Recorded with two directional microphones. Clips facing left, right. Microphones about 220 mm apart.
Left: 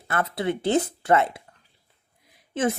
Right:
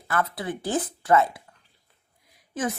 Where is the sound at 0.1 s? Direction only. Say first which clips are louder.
Left 2 dB; 25° left (ahead or behind).